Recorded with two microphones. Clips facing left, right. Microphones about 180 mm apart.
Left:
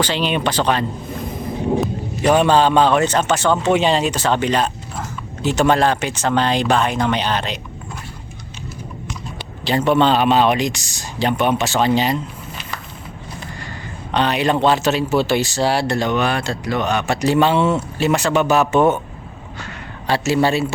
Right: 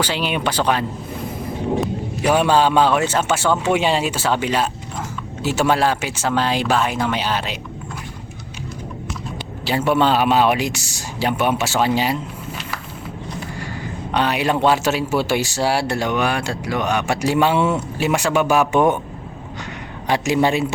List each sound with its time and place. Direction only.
0.0 s speech: 10° right (ahead or behind)
9.6 s speech: 10° right (ahead or behind)
14.1 s speech: 10° right (ahead or behind)
20.1 s speech: 15° right (ahead or behind)